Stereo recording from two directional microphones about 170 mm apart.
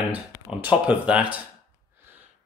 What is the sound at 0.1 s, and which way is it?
Speech, 10° right (ahead or behind).